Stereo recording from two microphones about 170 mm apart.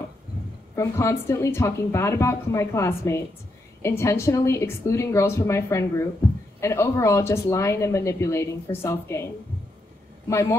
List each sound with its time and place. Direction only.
0.7 s speech: 15° left (ahead or behind)
10.3 s speech: 15° left (ahead or behind)